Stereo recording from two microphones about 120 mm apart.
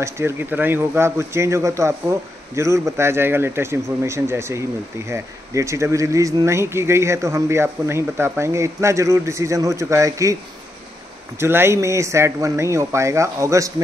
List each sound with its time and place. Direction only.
0.0 s speech: 20° right (ahead or behind)
11.3 s speech: 20° right (ahead or behind)